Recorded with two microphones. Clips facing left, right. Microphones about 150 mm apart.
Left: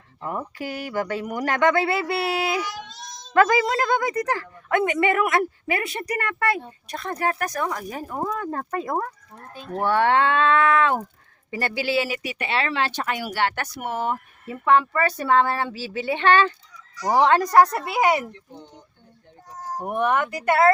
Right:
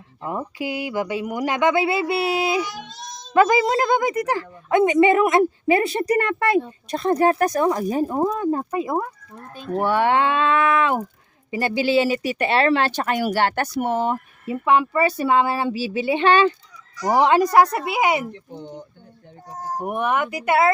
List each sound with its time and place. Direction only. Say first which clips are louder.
0.2 s a woman's voice: right 3 dB; 15° right (ahead or behind)
19.8 s speech: even; 5° right (ahead or behind)